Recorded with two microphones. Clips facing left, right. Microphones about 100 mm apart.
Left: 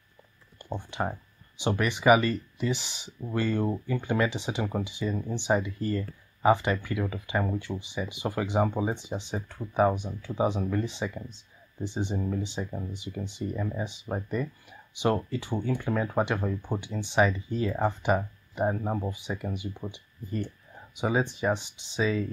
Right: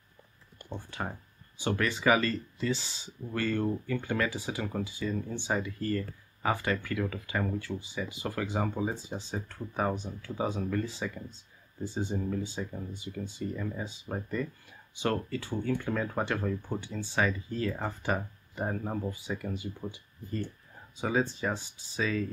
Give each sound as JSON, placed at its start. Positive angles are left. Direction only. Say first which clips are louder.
{"t": 0.7, "sound": "speech", "louder": "left 6 dB", "side_deg": 20}